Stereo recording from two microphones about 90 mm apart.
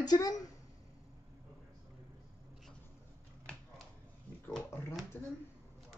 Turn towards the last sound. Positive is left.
turn(degrees=20)  # may be behind; listen again after turning